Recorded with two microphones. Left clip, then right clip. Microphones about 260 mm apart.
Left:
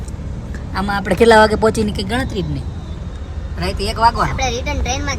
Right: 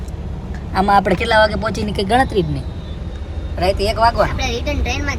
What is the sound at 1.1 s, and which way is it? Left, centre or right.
Speech, centre.